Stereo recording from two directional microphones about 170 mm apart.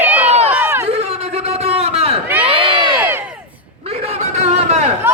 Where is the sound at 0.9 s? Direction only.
35° right (ahead or behind).